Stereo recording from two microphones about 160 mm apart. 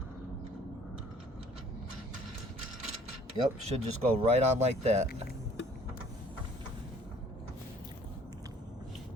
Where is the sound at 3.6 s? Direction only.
40° right (ahead or behind).